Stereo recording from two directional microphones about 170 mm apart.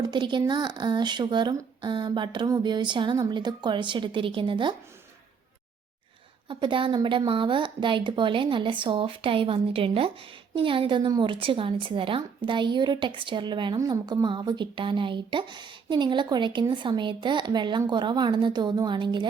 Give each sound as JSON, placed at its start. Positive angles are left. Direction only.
{"t": 0.0, "sound": "a woman's voice", "side_deg": -25}
{"t": 6.5, "sound": "a woman's voice", "side_deg": -30}